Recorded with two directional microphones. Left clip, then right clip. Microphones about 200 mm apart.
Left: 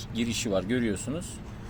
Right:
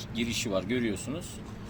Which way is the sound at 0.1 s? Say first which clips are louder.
Left 2 dB; 35° left (ahead or behind).